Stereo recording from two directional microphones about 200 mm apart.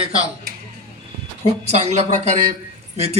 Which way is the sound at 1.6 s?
35° right (ahead or behind).